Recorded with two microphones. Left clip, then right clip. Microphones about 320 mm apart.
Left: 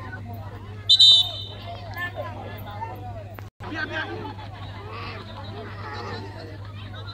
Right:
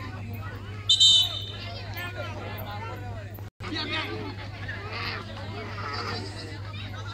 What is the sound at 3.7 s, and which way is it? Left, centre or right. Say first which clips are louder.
Hubbub: left 1 dB; centre.